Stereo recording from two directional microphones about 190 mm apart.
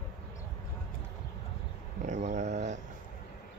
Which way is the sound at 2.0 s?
40° right (ahead or behind).